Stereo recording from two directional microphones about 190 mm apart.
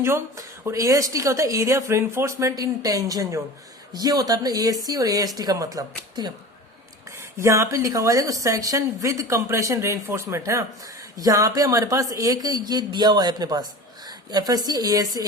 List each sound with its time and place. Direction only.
0.0 s a woman's voice: 15° right (ahead or behind)